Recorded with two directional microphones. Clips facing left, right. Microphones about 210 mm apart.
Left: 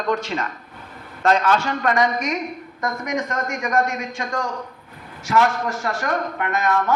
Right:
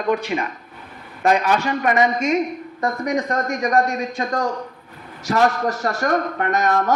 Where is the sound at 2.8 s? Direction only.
35° right (ahead or behind).